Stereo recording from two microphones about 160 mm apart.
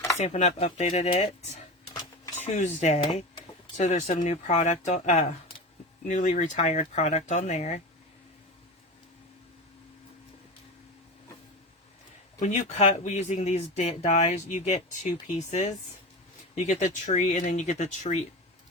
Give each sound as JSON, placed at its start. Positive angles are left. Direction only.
{"t": 0.2, "sound": "speech", "side_deg": 45}
{"t": 2.3, "sound": "dishes", "side_deg": 45}
{"t": 3.8, "sound": "speech", "side_deg": 50}
{"t": 12.4, "sound": "speech", "side_deg": 50}